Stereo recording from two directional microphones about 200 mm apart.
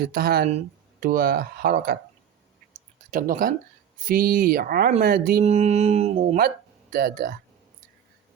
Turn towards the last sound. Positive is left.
turn(degrees=-45)  # may be behind; listen again after turning